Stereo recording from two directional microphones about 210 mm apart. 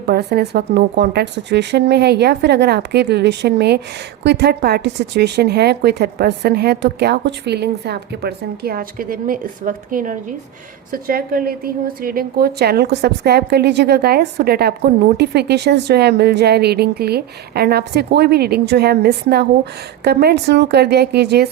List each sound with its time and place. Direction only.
0.1 s a woman's voice: 50° right (ahead or behind)